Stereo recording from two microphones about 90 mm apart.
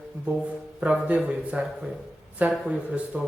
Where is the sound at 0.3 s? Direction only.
15° right (ahead or behind).